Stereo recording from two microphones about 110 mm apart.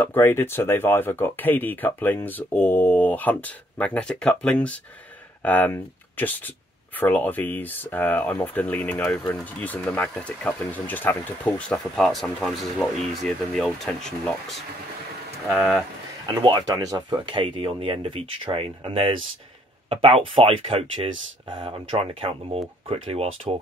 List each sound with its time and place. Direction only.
0.0 s speech: 20° left (ahead or behind)
15.5 s speech: 5° right (ahead or behind)
16.4 s speech: 40° right (ahead or behind)
17.4 s speech: 55° right (ahead or behind)